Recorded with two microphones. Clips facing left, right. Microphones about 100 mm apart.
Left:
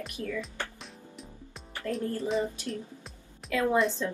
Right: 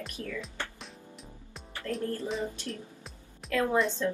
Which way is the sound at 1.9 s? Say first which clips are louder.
Left 2 dB; centre (ahead or behind).